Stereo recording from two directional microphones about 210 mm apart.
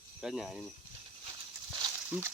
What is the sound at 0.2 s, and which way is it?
Speech, centre (ahead or behind).